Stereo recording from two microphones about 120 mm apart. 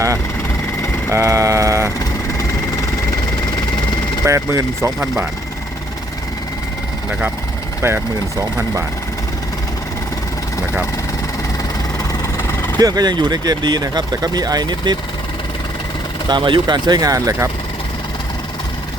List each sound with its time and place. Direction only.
1.1 s speech: 25° right (ahead or behind)
4.3 s speech: 25° right (ahead or behind)
7.8 s speech: 20° right (ahead or behind)
12.8 s speech: 35° right (ahead or behind)
16.3 s speech: 40° right (ahead or behind)